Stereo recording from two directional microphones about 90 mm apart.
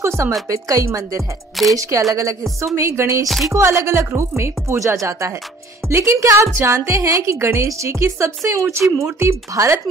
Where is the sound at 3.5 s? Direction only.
30° right (ahead or behind).